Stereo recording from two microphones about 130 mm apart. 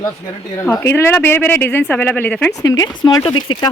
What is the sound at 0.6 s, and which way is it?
Speech, 20° left (ahead or behind).